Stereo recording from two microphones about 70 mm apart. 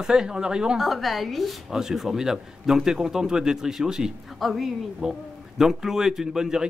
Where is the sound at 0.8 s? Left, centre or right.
Centre.